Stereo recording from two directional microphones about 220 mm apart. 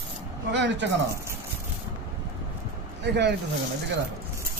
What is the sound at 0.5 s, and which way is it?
Speech, 55° right (ahead or behind).